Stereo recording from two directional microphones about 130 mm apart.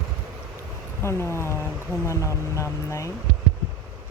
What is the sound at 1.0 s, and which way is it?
Speech, 20° left (ahead or behind).